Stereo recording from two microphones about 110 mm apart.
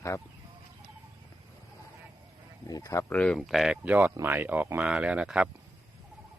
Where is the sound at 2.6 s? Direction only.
30° left (ahead or behind).